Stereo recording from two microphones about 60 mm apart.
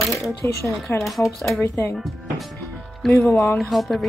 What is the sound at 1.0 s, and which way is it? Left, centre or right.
Speech, centre.